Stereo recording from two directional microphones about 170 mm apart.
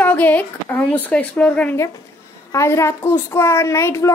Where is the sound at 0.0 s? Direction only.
10° left (ahead or behind).